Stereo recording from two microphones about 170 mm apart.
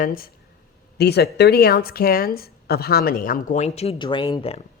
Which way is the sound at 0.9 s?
75° left (ahead or behind).